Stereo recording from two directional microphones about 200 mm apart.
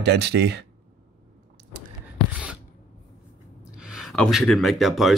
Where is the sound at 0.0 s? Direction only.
55° right (ahead or behind).